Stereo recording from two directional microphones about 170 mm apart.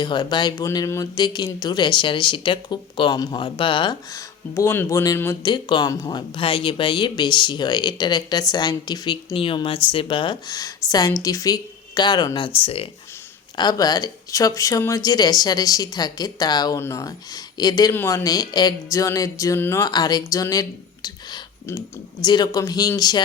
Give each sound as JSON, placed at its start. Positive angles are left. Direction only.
{"t": 0.0, "sound": "speech", "side_deg": 25}
{"t": 13.6, "sound": "speech", "side_deg": 25}